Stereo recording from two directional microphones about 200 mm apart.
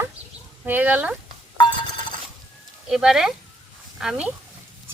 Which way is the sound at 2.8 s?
5° right (ahead or behind).